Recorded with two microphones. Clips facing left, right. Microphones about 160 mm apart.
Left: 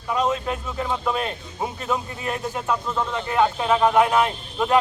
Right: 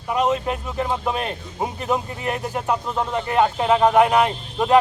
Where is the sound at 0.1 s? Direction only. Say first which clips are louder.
Right 2 dB; 20° right (ahead or behind).